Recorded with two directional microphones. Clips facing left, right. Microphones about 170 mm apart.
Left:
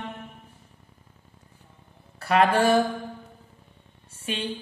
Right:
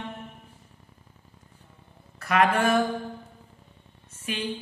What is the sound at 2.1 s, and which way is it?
Speech, 30° left (ahead or behind).